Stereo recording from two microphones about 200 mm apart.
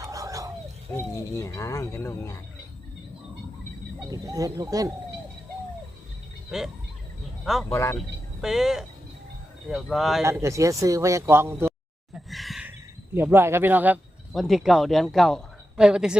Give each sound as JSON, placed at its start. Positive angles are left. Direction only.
{"t": 0.0, "sound": "a sound", "side_deg": -15}
{"t": 0.9, "sound": "speech", "side_deg": 15}
{"t": 4.1, "sound": "a man's voice", "side_deg": -15}
{"t": 6.5, "sound": "speech", "side_deg": 0}
{"t": 7.7, "sound": "speech", "side_deg": 15}
{"t": 7.9, "sound": "speech", "side_deg": 0}
{"t": 10.2, "sound": "a man's voice", "side_deg": -15}
{"t": 12.1, "sound": "a sound", "side_deg": 0}
{"t": 13.1, "sound": "speech", "side_deg": -10}